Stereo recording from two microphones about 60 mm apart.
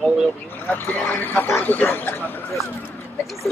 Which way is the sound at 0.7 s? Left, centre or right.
Left.